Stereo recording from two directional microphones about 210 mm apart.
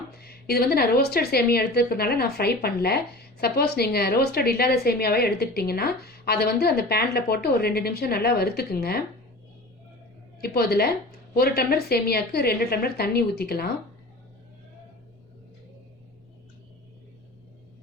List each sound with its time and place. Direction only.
0.1 s a woman's voice: 50° left (ahead or behind)
10.4 s a woman's voice: 50° left (ahead or behind)